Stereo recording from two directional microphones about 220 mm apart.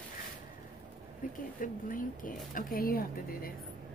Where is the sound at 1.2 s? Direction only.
40° left (ahead or behind).